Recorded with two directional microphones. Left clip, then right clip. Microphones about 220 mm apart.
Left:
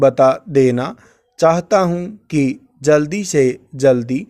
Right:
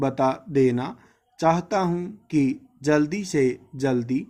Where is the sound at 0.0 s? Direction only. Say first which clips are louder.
Left 12 dB; 45° left (ahead or behind).